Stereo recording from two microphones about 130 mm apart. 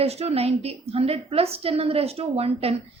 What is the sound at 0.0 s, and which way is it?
A woman's voice, 55° right (ahead or behind).